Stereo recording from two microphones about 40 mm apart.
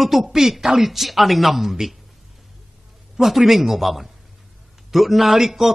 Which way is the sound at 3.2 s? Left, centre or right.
Centre.